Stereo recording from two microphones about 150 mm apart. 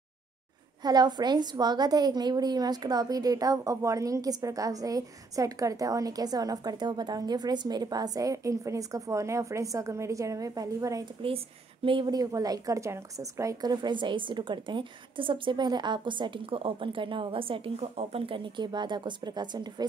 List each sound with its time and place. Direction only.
0.8 s a woman's voice: 30° right (ahead or behind)
11.2 s a woman's voice: 35° right (ahead or behind)